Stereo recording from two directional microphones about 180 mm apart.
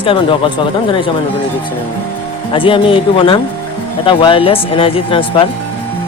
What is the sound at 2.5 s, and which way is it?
Speech, 30° left (ahead or behind).